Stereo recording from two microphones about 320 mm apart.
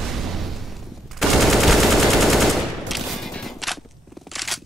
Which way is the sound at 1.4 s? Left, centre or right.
Centre.